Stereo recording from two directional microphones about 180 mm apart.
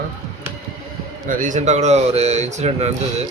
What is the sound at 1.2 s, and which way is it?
Speech, 45° right (ahead or behind).